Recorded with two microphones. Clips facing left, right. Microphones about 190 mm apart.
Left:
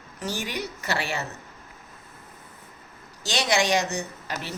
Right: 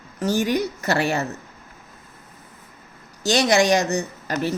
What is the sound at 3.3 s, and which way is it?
A woman's voice, 45° right (ahead or behind).